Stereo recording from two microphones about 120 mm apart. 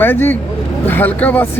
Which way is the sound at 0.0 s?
15° left (ahead or behind).